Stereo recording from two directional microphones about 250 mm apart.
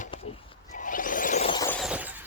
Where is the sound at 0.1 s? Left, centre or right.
Centre.